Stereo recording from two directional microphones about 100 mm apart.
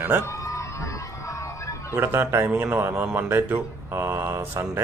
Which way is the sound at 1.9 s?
20° right (ahead or behind).